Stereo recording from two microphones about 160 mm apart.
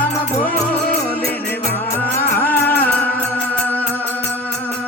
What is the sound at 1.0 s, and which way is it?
Music, 15° left (ahead or behind).